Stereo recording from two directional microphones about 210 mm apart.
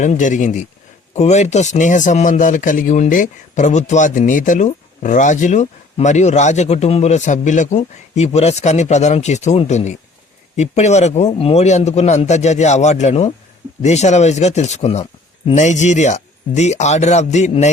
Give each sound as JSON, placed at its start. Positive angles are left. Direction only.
{"t": 0.0, "sound": "speech", "side_deg": 35}